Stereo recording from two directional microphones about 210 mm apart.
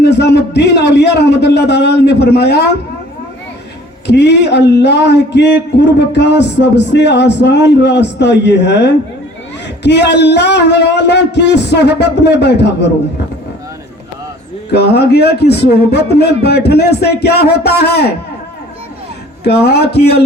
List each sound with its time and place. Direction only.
0.0 s a man's voice: 50° left (ahead or behind)
4.0 s a man's voice: 55° left (ahead or behind)
14.7 s a man's voice: 50° left (ahead or behind)
19.5 s a man's voice: 50° left (ahead or behind)